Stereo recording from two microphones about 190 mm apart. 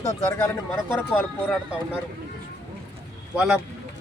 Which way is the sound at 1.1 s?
Centre (ahead or behind).